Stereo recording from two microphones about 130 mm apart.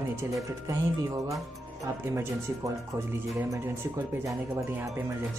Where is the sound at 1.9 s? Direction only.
25° right (ahead or behind).